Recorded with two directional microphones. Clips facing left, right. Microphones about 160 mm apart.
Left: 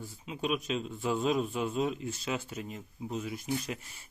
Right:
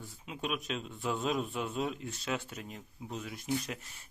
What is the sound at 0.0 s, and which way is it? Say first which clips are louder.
A man's voice: left 4 dB; centre (ahead or behind).